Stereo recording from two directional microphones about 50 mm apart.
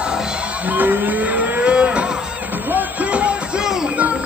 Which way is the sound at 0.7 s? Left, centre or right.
Right.